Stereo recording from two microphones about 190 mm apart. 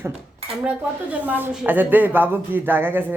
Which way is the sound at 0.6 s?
5° right (ahead or behind).